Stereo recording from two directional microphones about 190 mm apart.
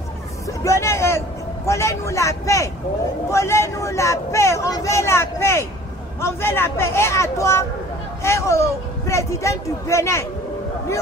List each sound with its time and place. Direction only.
0.5 s hubbub: 15° left (ahead or behind)
1.7 s speech: 15° left (ahead or behind)